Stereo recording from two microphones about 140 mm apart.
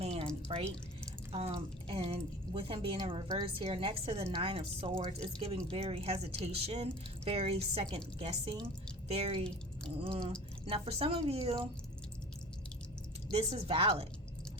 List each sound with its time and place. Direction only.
0.0 s drip: 45° right (ahead or behind)
0.5 s speech: 40° right (ahead or behind)
3.0 s a woman's voice: 30° right (ahead or behind)
3.4 s speech: 45° right (ahead or behind)
10.0 s drip: 40° right (ahead or behind)
10.7 s speech: 45° right (ahead or behind)
13.3 s speech: 45° right (ahead or behind)